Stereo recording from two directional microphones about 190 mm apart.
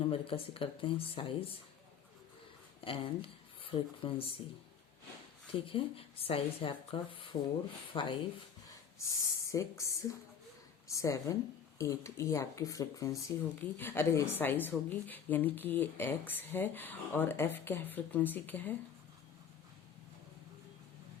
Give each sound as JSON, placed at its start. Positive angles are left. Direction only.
{"t": 0.0, "sound": "speech", "side_deg": 30}
{"t": 2.8, "sound": "speech", "side_deg": 30}
{"t": 5.5, "sound": "a woman's voice", "side_deg": 30}